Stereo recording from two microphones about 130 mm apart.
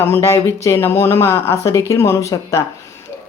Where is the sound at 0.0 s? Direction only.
20° left (ahead or behind).